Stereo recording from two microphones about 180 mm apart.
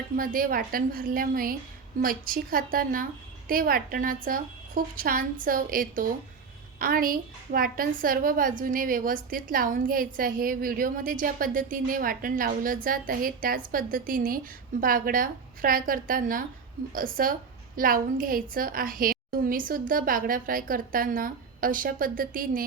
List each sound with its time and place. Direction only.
0.2 s a woman's voice: 50° right (ahead or behind)